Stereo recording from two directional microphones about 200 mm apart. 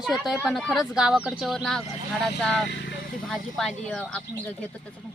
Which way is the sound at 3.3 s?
Centre (ahead or behind).